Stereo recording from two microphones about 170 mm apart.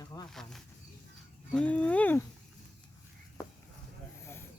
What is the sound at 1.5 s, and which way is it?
Speech, 5° left (ahead or behind).